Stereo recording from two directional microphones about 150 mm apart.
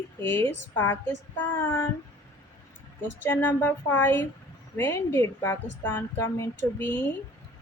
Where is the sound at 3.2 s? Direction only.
15° left (ahead or behind).